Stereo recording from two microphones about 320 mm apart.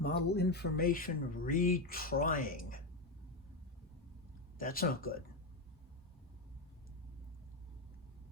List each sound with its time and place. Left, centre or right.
0.0 s speech: left
4.5 s speech: left